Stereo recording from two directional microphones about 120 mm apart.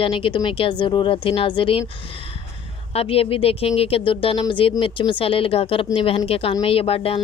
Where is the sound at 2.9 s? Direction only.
50° left (ahead or behind).